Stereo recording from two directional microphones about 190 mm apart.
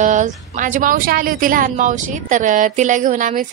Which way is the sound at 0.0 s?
40° right (ahead or behind).